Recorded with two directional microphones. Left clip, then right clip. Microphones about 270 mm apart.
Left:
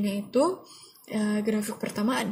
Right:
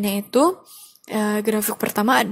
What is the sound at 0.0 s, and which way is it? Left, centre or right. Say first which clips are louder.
A woman's voice: right 7 dB; right.